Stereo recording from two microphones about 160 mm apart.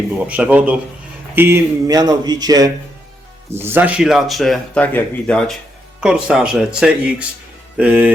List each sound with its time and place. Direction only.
0.2 s speech: 10° right (ahead or behind); by 5.5 s 5° left (ahead or behind)
6.0 s speech: 5° right (ahead or behind)